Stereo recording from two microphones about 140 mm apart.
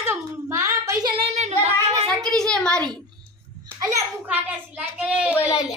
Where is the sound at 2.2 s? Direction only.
5° left (ahead or behind).